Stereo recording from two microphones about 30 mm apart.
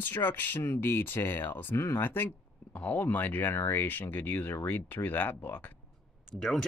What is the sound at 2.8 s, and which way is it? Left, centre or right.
Speech, left.